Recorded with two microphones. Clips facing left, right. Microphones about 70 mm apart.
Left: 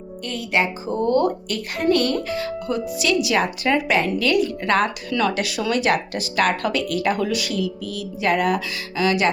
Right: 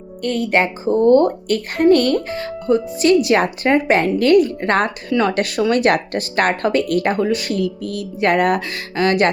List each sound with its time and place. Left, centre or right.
0.2 s a woman's voice: right
5.3 s speech: right